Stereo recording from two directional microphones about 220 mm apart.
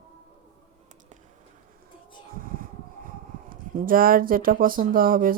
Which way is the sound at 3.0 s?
40° right (ahead or behind).